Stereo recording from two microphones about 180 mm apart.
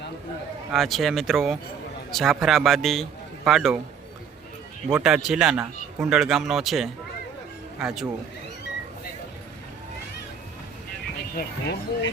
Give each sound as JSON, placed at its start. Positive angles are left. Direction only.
{"t": 0.7, "sound": "a man's voice", "side_deg": 0}
{"t": 4.9, "sound": "a man's voice", "side_deg": -5}
{"t": 11.3, "sound": "speech", "side_deg": 70}